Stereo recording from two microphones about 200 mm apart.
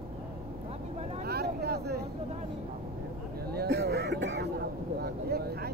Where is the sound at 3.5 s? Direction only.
55° right (ahead or behind).